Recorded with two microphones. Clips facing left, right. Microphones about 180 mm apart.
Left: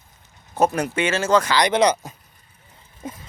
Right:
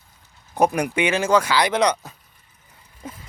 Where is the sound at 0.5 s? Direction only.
15° right (ahead or behind).